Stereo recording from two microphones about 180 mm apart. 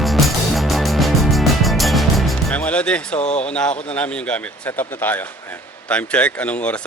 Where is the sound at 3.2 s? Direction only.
40° left (ahead or behind).